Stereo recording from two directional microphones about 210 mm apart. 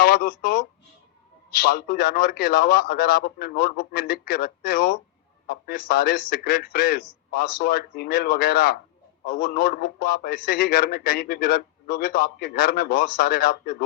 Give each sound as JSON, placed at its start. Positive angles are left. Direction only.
{"t": 0.0, "sound": "speech", "side_deg": 45}
{"t": 1.6, "sound": "a man's voice", "side_deg": 50}